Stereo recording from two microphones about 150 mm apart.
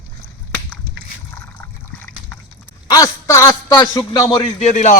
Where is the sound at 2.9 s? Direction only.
20° left (ahead or behind).